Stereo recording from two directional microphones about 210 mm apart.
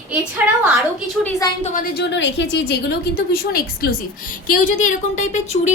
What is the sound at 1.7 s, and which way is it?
A woman's voice, 45° left (ahead or behind).